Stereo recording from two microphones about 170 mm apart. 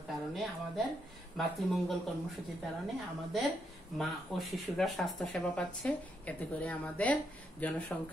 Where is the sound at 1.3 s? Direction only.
Centre (ahead or behind).